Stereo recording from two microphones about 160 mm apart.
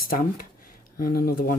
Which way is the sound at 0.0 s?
65° left (ahead or behind).